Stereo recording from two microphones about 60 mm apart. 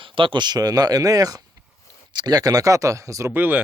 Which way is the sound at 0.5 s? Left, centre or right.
Right.